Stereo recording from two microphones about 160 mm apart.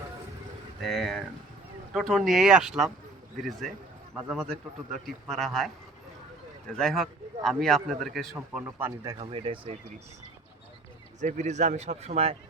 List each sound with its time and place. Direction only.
0.8 s a man's voice: centre (ahead or behind)
4.2 s speech: 10° right (ahead or behind)
4.4 s a man's voice: centre (ahead or behind)
8.6 s speech: 15° right (ahead or behind)
9.1 s speech: 35° right (ahead or behind)
11.2 s speech: 50° right (ahead or behind)